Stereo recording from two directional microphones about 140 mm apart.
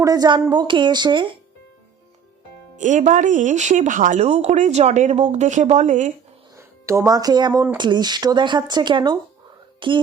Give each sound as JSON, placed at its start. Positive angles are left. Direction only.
{"t": 0.0, "sound": "speech", "side_deg": -25}
{"t": 2.7, "sound": "speech", "side_deg": -60}
{"t": 6.6, "sound": "speech", "side_deg": -20}